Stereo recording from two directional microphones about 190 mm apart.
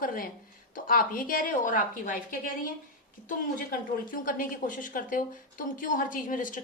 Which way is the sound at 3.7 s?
45° left (ahead or behind).